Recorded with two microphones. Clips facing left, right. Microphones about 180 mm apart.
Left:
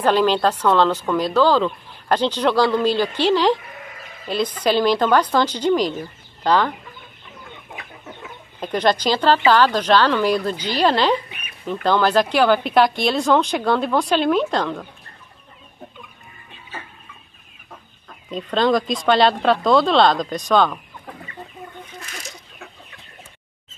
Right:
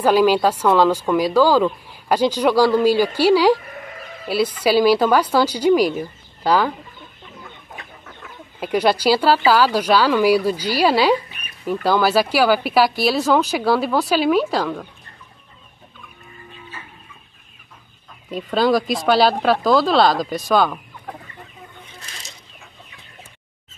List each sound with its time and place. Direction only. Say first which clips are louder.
0.0 s speech: right 2 dB; 10° right (ahead or behind)
8.5 s speech: right 1 dB; 10° right (ahead or behind)
11.2 s a sound: left 2 dB; 35° right (ahead or behind)
11.6 s speech: right 1 dB; 10° right (ahead or behind)
18.3 s speech: right 1 dB; 5° right (ahead or behind)